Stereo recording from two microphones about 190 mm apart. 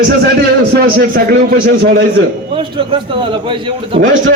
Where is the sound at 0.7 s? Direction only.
55° right (ahead or behind).